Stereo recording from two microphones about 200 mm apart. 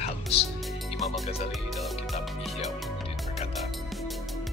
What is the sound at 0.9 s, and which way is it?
Speech, centre (ahead or behind).